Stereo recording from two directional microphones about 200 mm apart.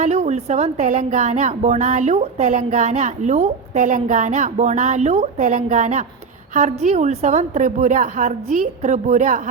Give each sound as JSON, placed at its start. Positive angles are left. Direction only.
{"t": 0.0, "sound": "a woman's voice", "side_deg": -35}